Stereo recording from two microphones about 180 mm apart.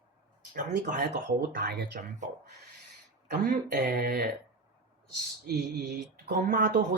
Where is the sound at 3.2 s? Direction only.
65° right (ahead or behind).